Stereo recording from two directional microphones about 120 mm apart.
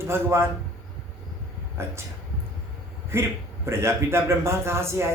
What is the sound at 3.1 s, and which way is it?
A man's voice, 20° right (ahead or behind).